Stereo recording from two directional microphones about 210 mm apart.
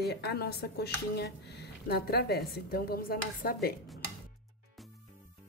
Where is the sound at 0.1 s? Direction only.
50° left (ahead or behind).